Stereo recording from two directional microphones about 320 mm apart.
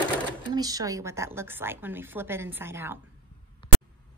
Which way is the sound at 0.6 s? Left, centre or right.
Centre.